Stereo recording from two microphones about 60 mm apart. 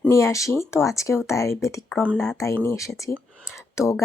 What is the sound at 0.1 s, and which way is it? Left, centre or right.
Speech, left.